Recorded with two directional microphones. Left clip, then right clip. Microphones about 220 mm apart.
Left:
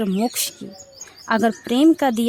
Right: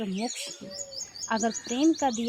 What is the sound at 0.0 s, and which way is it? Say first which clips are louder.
Speech: left 10 dB; 45° left (ahead or behind).